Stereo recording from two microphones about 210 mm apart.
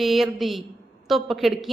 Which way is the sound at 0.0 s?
Centre (ahead or behind).